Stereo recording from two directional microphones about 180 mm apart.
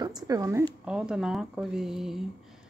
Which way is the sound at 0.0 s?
20° right (ahead or behind).